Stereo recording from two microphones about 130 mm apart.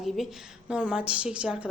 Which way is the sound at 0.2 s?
5° right (ahead or behind).